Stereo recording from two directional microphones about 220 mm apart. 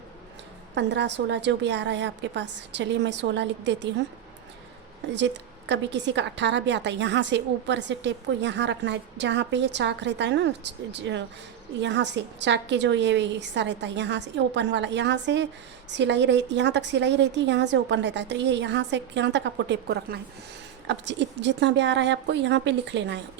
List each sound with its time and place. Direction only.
0.8 s a woman's voice: 50° right (ahead or behind)
5.1 s a woman's voice: 55° right (ahead or behind)